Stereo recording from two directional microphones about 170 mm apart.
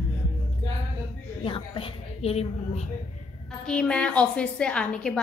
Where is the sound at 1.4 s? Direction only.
30° left (ahead or behind).